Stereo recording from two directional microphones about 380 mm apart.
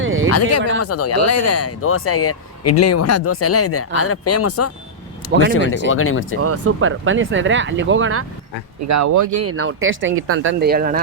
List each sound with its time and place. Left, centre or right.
0.0 s a sound: right
0.3 s speech: left
5.3 s speech: right
5.9 s speech: left
6.4 s speech: right
8.9 s speech: right